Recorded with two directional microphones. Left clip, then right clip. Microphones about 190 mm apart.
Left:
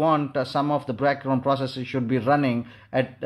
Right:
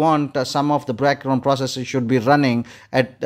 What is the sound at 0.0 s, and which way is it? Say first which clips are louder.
Speech: right 4 dB; 30° right (ahead or behind).